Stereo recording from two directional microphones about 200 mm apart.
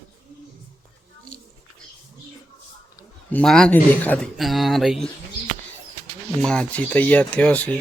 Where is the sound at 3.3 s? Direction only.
5° left (ahead or behind).